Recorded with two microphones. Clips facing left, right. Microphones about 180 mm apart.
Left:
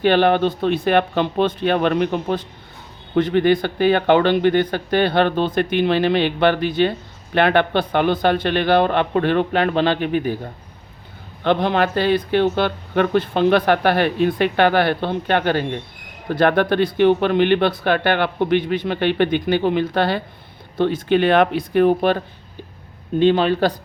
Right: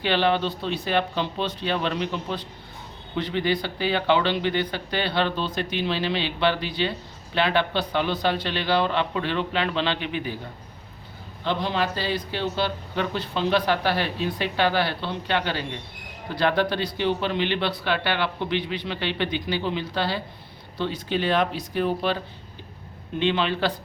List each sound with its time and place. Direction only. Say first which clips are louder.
0.0 s a man's voice: left 7 dB; 50° left (ahead or behind)
11.4 s a man's voice: left 8 dB; 60° left (ahead or behind)
23.2 s a man's voice: left 8 dB; 40° left (ahead or behind)